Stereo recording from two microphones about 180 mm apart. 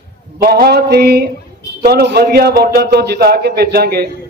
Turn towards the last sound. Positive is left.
turn(degrees=-60)  # may be behind; listen again after turning